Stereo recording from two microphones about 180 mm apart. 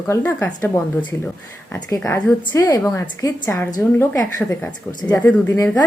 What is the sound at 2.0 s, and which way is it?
A woman's voice, 10° left (ahead or behind).